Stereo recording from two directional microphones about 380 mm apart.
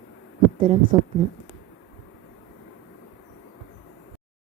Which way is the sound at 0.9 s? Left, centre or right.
Centre.